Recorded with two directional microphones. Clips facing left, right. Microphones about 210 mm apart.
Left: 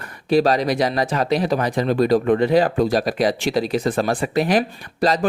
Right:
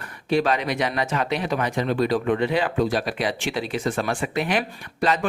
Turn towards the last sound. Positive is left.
turn(degrees=35)  # may be behind; listen again after turning